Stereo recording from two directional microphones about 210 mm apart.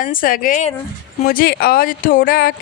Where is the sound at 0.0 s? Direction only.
40° left (ahead or behind).